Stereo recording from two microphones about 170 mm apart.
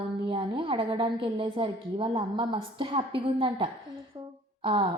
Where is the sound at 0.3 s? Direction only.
30° right (ahead or behind).